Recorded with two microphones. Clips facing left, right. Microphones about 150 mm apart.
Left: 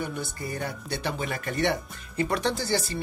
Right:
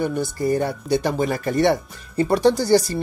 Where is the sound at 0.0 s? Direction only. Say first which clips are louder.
Right 11 dB; 35° right (ahead or behind).